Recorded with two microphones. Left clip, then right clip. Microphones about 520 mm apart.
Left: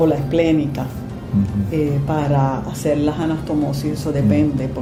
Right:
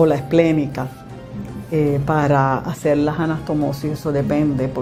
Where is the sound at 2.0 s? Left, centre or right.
Right.